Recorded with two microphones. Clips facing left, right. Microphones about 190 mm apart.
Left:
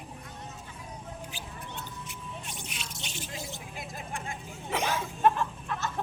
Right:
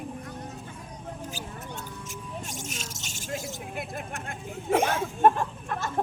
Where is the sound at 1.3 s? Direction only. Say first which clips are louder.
Right 4 dB; 45° right (ahead or behind).